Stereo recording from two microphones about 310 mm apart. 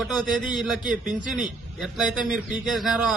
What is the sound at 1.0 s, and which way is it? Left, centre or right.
Speech, right.